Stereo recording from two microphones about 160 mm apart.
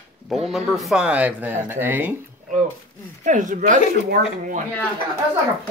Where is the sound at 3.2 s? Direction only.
50° right (ahead or behind).